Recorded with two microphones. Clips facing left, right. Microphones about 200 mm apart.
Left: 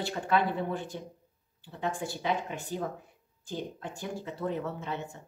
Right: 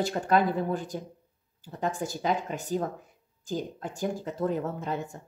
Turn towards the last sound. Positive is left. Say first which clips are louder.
# right 4 dB
turn(degrees=-45)  # may be behind; listen again after turning